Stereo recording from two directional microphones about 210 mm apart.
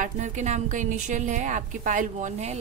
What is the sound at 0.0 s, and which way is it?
A woman's voice, 35° right (ahead or behind).